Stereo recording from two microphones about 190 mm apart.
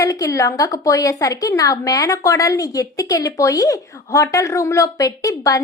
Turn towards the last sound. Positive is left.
turn(degrees=15)  # may be behind; listen again after turning